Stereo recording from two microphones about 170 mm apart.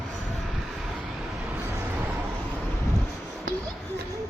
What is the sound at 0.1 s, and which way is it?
Vehicle, centre (ahead or behind).